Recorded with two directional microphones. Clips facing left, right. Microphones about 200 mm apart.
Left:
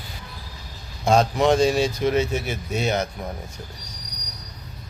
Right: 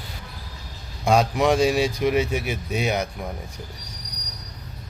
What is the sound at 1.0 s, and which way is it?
Speech, 10° right (ahead or behind).